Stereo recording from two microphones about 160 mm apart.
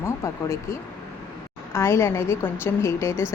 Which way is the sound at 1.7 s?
15° left (ahead or behind).